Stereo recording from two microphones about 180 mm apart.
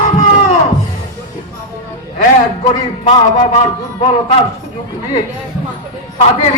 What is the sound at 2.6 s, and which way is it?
Speech, 30° left (ahead or behind).